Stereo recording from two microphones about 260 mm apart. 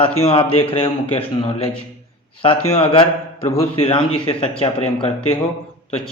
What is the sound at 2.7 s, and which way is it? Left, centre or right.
Speech, left.